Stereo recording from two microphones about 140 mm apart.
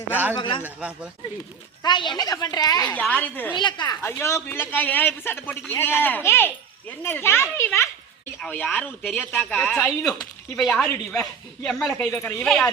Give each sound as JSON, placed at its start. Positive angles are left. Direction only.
{"t": 0.3, "sound": "a woman's voice", "side_deg": 35}
{"t": 0.6, "sound": "a man's voice", "side_deg": -10}
{"t": 1.8, "sound": "a woman's voice", "side_deg": 30}
{"t": 2.9, "sound": "speech", "side_deg": 10}
{"t": 3.5, "sound": "a woman's voice", "side_deg": 35}
{"t": 4.0, "sound": "speech", "side_deg": 20}
{"t": 10.6, "sound": "speech", "side_deg": 0}
{"t": 12.1, "sound": "speech", "side_deg": 15}
{"t": 12.5, "sound": "speech", "side_deg": 5}